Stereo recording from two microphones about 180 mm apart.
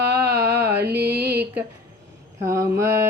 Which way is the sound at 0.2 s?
15° right (ahead or behind).